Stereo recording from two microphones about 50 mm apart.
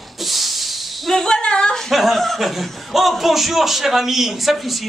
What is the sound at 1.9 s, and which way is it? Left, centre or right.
A man's voice, centre.